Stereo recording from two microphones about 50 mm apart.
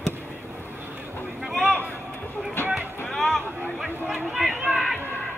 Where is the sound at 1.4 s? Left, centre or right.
Centre.